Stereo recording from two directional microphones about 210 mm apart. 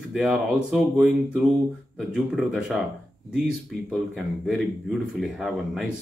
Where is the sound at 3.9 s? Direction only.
Centre (ahead or behind).